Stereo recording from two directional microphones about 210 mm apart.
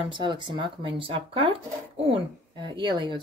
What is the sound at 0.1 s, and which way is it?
Speech, 25° right (ahead or behind).